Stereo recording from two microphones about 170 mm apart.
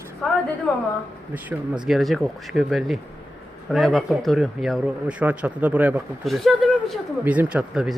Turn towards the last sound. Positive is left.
turn(degrees=-5)  # may be behind; listen again after turning